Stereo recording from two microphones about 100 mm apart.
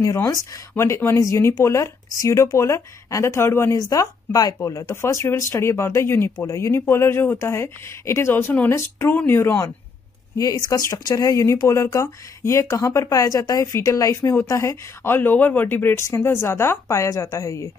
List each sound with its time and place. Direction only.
0.0 s speech: 35° left (ahead or behind)
10.3 s speech: 35° left (ahead or behind)